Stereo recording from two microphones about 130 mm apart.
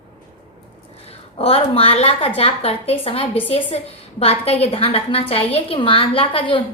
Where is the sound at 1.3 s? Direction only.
50° left (ahead or behind).